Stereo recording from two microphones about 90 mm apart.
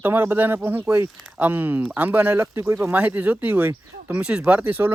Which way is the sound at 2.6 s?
35° right (ahead or behind).